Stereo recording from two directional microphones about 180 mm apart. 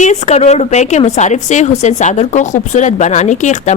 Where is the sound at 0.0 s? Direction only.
40° left (ahead or behind).